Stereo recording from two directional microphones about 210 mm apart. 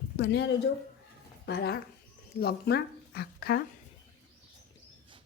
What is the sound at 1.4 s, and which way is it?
Speech, 55° left (ahead or behind).